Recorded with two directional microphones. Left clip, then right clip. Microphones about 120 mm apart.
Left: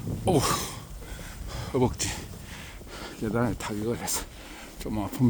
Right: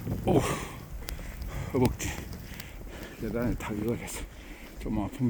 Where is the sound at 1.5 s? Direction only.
50° left (ahead or behind).